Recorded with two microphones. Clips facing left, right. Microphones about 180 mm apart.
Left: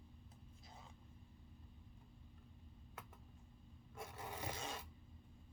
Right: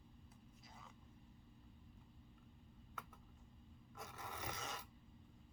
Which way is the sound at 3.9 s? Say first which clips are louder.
Left 3 dB; 30° left (ahead or behind).